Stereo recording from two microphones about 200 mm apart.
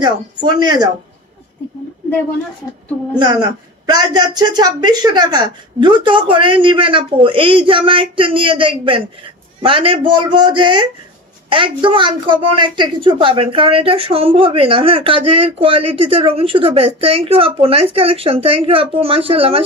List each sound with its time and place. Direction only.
0.0 s a woman's voice: 20° right (ahead or behind)
3.2 s a woman's voice: 20° right (ahead or behind)